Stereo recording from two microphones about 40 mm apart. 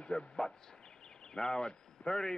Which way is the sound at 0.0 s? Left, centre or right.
Left.